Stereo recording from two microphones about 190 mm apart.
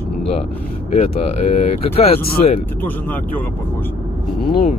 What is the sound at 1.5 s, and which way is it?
Speech, 30° left (ahead or behind).